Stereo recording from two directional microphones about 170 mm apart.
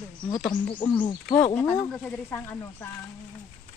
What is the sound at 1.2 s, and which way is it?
Speech, 10° left (ahead or behind).